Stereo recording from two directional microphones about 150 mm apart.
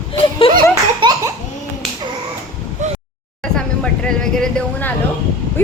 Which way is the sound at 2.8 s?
55° right (ahead or behind).